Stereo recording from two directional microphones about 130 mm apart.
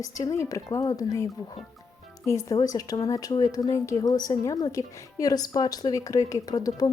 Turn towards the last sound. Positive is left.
turn(degrees=30)  # may be behind; listen again after turning